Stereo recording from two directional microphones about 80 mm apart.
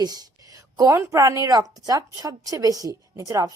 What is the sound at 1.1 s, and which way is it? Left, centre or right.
Speech, right.